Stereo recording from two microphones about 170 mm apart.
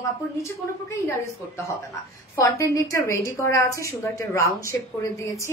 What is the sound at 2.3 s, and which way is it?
A woman's voice, 20° left (ahead or behind).